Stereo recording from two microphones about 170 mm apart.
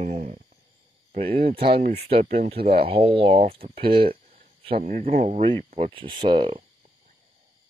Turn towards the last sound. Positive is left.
turn(degrees=-30)  # may be behind; listen again after turning